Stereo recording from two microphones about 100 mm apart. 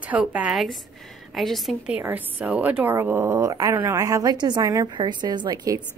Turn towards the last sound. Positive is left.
turn(degrees=-35)  # may be behind; listen again after turning